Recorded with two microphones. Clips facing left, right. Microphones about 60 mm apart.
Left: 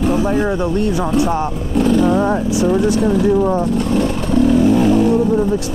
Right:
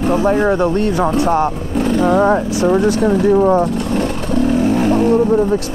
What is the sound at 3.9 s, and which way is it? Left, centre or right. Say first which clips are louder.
Wild animals: left 2 dB; right.